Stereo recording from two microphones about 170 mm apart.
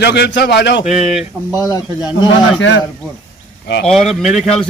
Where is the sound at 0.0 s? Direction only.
85° left.